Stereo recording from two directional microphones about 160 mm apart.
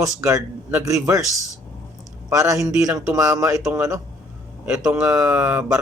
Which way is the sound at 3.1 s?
15° right (ahead or behind).